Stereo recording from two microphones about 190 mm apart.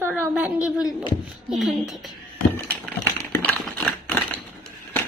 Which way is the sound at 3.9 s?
10° left (ahead or behind).